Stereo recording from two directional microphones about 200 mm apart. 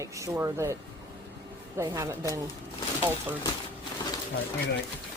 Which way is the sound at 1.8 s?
15° right (ahead or behind).